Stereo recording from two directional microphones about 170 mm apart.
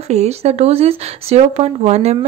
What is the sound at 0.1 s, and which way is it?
Speech, 40° right (ahead or behind).